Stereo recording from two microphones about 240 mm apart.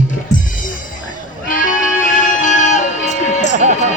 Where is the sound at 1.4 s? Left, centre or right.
Left.